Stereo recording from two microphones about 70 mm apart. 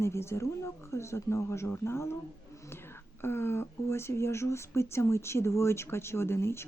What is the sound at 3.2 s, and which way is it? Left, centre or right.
Speech, left.